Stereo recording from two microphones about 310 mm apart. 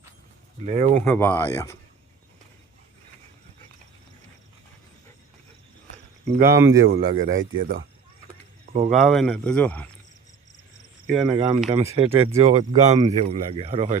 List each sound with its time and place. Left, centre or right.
0.6 s speech: right
1.0 s speech: centre
6.2 s speech: right
6.5 s speech: centre
6.8 s speech: right
9.0 s speech: centre
11.0 s cricket: centre
11.3 s speech: centre
12.9 s speech: centre